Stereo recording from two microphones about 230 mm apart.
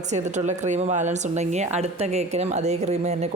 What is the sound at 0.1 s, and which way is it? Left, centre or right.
Speech, right.